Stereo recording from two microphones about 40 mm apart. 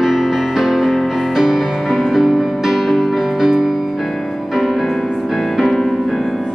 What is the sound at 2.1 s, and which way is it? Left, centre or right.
Music, centre.